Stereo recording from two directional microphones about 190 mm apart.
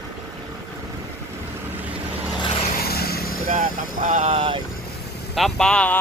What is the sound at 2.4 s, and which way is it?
Vehicle, 30° left (ahead or behind).